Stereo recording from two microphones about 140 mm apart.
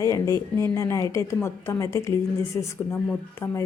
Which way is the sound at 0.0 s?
25° left (ahead or behind).